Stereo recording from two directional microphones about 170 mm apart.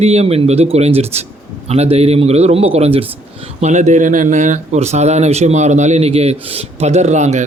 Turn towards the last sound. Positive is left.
turn(degrees=-45)  # may be behind; listen again after turning